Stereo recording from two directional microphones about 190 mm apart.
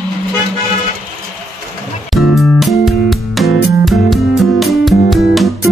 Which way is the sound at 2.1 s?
Centre (ahead or behind).